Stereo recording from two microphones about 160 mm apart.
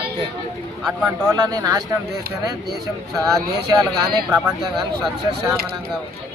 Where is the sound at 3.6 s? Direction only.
25° right (ahead or behind).